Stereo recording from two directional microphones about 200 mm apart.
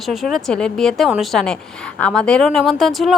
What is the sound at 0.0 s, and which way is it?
A woman's voice, centre (ahead or behind).